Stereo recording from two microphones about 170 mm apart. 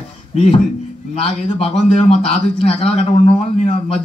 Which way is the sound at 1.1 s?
35° left (ahead or behind).